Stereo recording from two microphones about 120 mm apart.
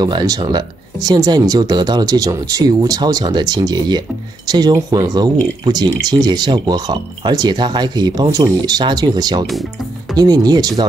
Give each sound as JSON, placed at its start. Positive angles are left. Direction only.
{"t": 0.0, "sound": "speech", "side_deg": -30}